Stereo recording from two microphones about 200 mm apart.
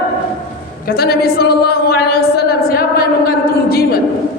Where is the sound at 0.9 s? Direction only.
50° left (ahead or behind).